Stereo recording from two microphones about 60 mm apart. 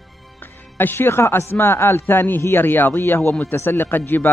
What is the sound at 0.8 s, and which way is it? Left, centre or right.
A man's voice, left.